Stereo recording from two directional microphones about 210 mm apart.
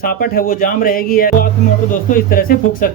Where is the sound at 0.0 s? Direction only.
45° left (ahead or behind).